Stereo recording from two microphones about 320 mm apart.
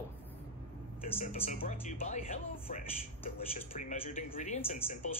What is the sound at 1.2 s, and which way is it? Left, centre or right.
Speech, left.